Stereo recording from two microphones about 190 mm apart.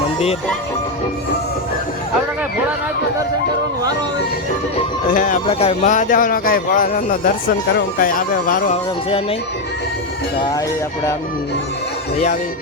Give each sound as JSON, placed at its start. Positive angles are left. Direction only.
{"t": 5.1, "sound": "speech", "side_deg": 40}
{"t": 8.7, "sound": "speech", "side_deg": 30}